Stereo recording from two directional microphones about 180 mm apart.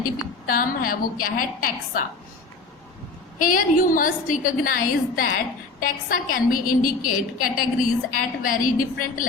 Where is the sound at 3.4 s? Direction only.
50° left (ahead or behind).